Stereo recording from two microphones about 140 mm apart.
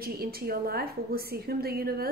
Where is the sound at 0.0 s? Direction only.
90° right.